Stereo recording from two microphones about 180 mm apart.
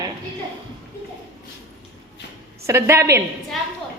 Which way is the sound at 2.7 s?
15° right (ahead or behind).